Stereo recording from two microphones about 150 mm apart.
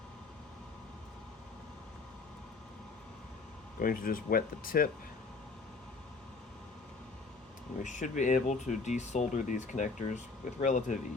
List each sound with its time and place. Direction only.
3.8 s speech: 70° left (ahead or behind)
7.8 s speech: 55° left (ahead or behind)